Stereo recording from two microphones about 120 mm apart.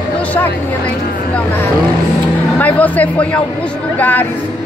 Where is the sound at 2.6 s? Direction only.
15° left (ahead or behind).